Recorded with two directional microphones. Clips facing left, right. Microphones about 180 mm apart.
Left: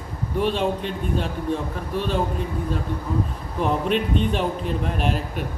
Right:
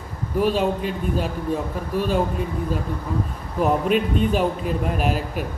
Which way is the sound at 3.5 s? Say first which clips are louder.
Right 3 dB; 5° right (ahead or behind).